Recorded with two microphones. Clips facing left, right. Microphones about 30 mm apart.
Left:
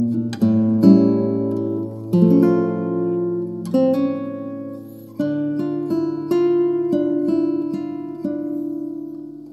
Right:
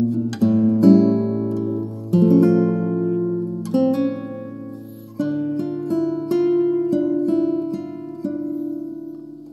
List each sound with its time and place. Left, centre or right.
0.0 s music: centre